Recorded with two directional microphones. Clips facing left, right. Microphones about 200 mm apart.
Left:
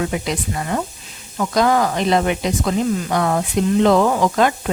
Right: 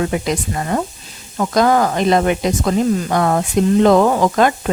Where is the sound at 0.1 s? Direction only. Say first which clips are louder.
Right 3 dB; 45° right (ahead or behind).